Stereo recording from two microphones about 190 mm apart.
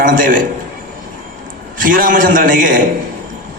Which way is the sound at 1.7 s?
45° right (ahead or behind).